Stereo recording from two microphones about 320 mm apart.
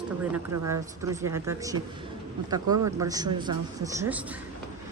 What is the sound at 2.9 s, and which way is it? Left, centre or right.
A man's voice, centre.